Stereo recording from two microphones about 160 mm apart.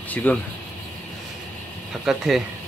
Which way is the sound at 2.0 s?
Centre (ahead or behind).